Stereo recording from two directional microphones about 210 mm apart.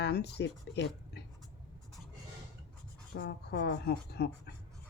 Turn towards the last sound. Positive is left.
turn(degrees=50)  # may be behind; listen again after turning